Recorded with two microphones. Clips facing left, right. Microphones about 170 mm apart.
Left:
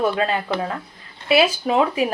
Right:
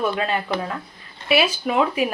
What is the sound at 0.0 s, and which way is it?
Speech, 30° left (ahead or behind).